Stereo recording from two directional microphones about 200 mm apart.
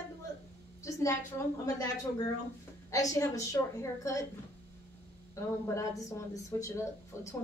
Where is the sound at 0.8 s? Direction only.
15° left (ahead or behind).